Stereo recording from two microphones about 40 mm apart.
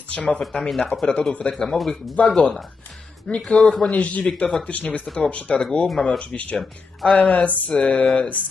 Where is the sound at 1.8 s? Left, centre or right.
Centre.